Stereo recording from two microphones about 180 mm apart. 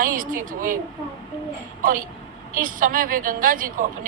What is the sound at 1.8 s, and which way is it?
A woman's voice, 50° right (ahead or behind).